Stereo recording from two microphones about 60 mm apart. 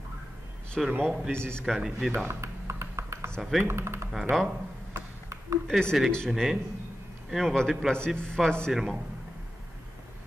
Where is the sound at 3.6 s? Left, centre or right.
Right.